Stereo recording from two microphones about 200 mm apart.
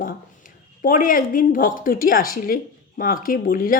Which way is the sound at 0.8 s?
45° left (ahead or behind).